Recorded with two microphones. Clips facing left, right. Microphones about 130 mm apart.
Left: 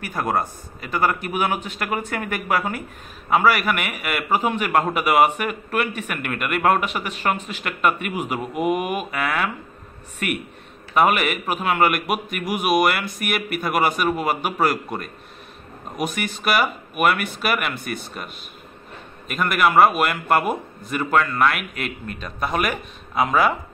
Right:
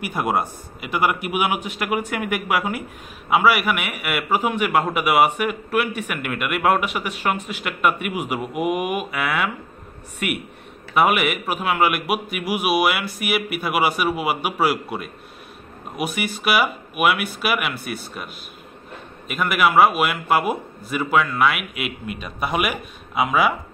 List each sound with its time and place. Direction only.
0.0 s a man's voice: 10° right (ahead or behind)